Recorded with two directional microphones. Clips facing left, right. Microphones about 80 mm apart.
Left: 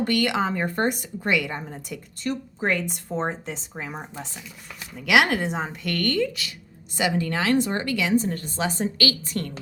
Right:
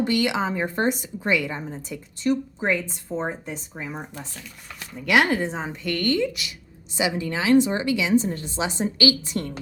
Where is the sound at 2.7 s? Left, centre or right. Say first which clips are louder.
Even; left.